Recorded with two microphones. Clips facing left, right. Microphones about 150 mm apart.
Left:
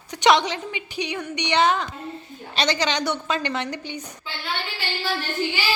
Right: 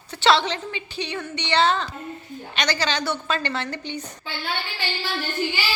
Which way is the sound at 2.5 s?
25° left (ahead or behind).